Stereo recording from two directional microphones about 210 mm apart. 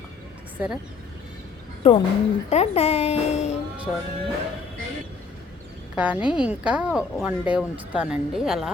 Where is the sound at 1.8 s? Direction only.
30° left (ahead or behind).